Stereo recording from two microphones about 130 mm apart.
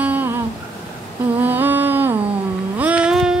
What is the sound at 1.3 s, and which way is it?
Humming, 15° right (ahead or behind).